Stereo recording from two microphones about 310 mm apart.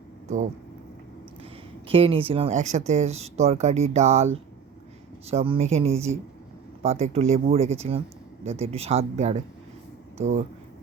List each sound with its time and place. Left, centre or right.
1.9 s speech: centre
5.3 s speech: centre